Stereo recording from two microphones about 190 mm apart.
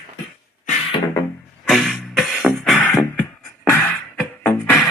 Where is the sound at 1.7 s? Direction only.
Centre (ahead or behind).